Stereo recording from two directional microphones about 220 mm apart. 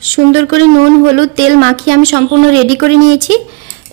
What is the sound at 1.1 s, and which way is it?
A woman's voice, 55° right (ahead or behind).